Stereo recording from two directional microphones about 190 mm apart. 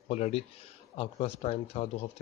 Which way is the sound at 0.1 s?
35° left (ahead or behind).